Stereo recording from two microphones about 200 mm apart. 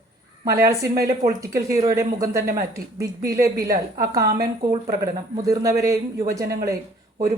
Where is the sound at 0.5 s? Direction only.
15° right (ahead or behind).